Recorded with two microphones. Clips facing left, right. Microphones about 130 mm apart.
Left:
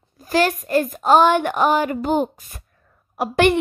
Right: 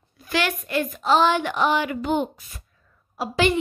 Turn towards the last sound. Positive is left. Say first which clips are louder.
# left 5 dB
turn(degrees=60)  # may be behind; listen again after turning